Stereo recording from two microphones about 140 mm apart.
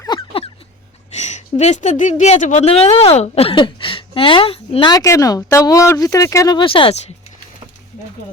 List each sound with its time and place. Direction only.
0.2 s a sound: 40° left (ahead or behind)
1.1 s speech: 55° left (ahead or behind)
2.6 s speech: 45° left (ahead or behind)
4.9 s speech: 25° left (ahead or behind); by 7.0 s 40° left (ahead or behind)